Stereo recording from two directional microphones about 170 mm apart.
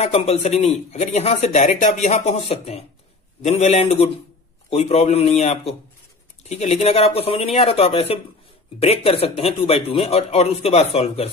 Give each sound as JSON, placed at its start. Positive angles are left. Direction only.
{"t": 0.0, "sound": "speech", "side_deg": 35}